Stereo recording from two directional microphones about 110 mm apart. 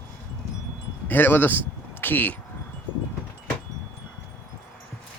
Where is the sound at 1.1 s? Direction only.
20° left (ahead or behind).